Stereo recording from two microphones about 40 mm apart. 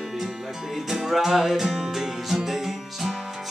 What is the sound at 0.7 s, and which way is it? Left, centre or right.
Music, centre.